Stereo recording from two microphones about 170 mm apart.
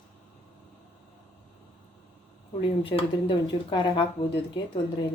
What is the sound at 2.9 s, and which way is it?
Speech, 30° left (ahead or behind).